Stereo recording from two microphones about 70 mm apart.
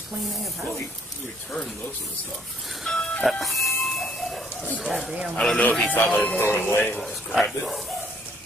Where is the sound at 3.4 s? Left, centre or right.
Centre.